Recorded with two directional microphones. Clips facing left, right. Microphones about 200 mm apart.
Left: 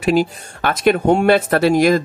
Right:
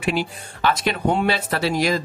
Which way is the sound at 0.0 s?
45° left (ahead or behind).